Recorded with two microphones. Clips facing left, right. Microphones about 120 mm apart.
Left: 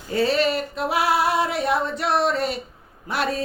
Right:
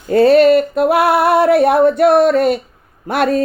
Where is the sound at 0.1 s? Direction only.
55° right (ahead or behind).